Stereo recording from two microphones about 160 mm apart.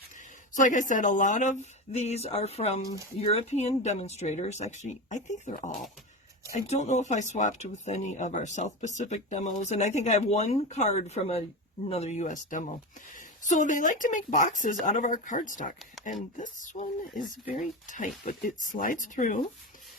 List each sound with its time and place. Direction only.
0.2 s a woman's voice: 50° left (ahead or behind)